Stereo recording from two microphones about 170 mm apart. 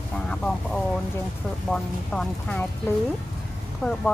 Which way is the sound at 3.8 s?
Centre (ahead or behind).